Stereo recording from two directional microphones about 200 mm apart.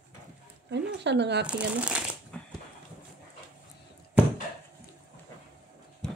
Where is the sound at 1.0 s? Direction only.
60° right (ahead or behind).